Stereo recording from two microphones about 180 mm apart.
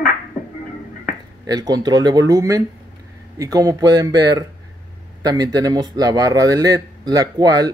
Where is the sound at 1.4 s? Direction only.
20° right (ahead or behind).